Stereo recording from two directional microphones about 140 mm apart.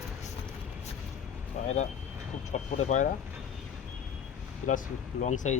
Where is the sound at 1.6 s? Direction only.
60° left (ahead or behind).